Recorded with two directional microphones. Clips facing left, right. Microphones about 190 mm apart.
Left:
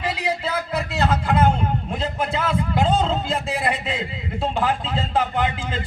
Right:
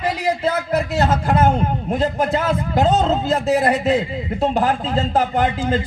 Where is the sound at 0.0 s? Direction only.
45° right (ahead or behind).